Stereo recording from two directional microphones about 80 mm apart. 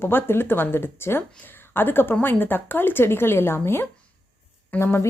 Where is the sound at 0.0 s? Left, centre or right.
Left.